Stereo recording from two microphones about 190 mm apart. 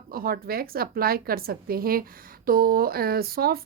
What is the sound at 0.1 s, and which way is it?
Speech, 50° right (ahead or behind).